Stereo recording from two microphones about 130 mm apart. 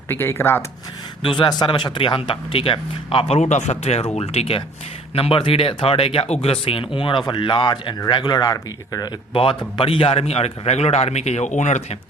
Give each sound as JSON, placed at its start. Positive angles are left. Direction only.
{"t": 0.1, "sound": "speech", "side_deg": 15}
{"t": 1.2, "sound": "a man's voice", "side_deg": 35}
{"t": 9.3, "sound": "a man's voice", "side_deg": 45}